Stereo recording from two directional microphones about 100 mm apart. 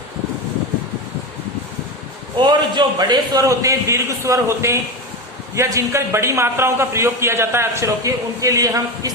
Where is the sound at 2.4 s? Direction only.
50° right (ahead or behind).